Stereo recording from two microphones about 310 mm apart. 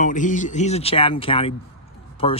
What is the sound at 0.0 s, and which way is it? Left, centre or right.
Speech, left.